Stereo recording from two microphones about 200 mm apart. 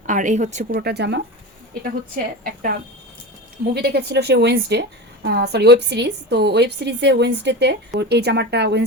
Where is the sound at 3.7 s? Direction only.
55° right (ahead or behind).